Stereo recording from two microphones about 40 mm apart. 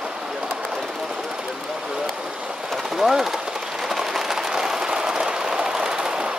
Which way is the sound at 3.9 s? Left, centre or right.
Centre.